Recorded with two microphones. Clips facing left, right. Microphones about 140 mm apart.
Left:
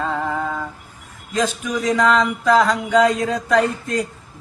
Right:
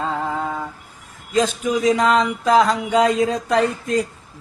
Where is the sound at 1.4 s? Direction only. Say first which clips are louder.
Right 3 dB; 20° right (ahead or behind).